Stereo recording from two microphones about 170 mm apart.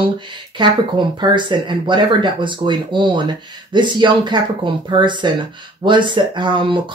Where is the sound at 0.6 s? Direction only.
25° right (ahead or behind).